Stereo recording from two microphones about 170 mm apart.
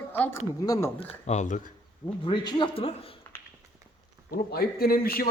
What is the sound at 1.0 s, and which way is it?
Speech, 40° left (ahead or behind).